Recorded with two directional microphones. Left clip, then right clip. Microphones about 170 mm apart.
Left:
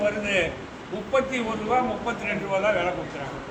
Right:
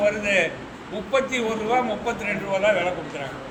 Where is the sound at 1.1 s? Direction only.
20° right (ahead or behind).